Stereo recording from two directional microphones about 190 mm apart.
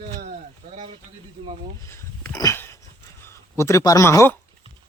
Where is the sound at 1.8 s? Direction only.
10° left (ahead or behind).